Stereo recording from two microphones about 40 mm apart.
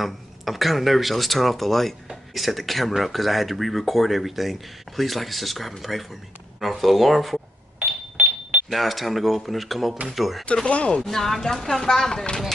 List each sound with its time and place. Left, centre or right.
0.0 s speech: centre
7.8 s a sound: right
8.7 s speech: centre